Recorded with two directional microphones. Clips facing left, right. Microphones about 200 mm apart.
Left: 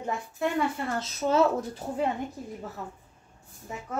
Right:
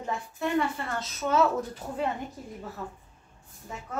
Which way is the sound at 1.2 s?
25° left (ahead or behind).